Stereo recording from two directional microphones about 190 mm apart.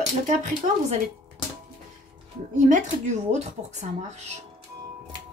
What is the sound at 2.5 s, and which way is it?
Speech, 40° right (ahead or behind).